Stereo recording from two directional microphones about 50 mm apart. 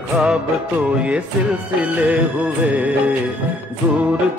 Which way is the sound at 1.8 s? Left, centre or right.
Right.